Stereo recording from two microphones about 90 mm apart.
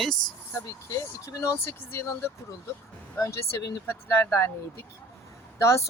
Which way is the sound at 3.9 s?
30° left (ahead or behind).